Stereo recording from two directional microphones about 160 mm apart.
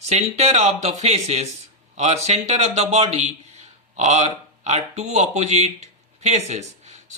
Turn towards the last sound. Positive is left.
turn(degrees=-45)  # may be behind; listen again after turning